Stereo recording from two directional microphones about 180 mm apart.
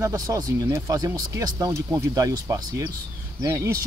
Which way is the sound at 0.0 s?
20° right (ahead or behind).